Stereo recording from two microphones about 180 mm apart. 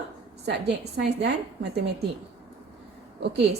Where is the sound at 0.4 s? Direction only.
65° right (ahead or behind).